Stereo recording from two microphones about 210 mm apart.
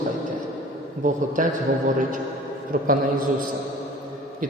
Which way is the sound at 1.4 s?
35° right (ahead or behind).